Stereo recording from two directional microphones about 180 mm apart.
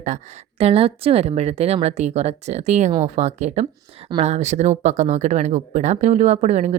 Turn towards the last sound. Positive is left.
turn(degrees=-40)  # may be behind; listen again after turning